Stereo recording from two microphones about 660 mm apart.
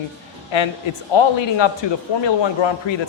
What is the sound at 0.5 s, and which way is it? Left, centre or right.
Speech, left.